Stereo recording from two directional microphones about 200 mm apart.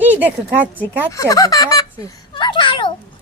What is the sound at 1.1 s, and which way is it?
Speech, 15° left (ahead or behind).